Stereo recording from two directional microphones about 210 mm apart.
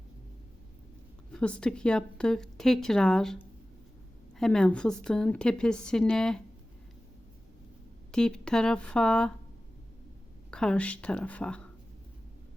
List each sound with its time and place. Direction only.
1.3 s a woman's voice: 5° left (ahead or behind)
8.1 s a woman's voice: 5° left (ahead or behind)
10.5 s a woman's voice: 5° left (ahead or behind)